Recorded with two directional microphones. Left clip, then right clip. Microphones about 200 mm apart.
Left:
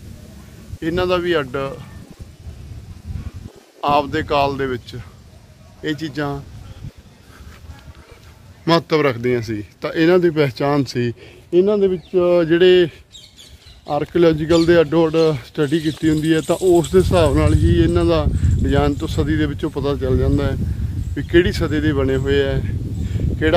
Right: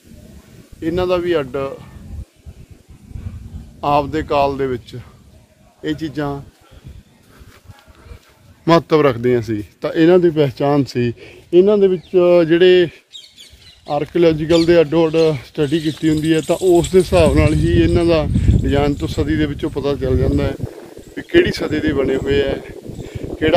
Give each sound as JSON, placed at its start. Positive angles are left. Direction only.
{"t": 0.7, "sound": "speech", "side_deg": -5}
{"t": 3.8, "sound": "speech", "side_deg": -5}
{"t": 8.6, "sound": "speech", "side_deg": -40}
{"t": 12.4, "sound": "speech", "side_deg": -5}